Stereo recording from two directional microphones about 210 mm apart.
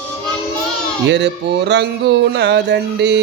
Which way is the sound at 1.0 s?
55° right (ahead or behind).